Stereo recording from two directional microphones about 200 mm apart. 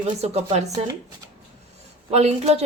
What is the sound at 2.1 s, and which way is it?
Speech, 30° right (ahead or behind).